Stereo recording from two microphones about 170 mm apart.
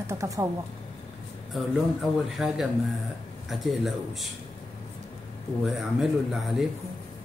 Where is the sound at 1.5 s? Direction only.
Centre (ahead or behind).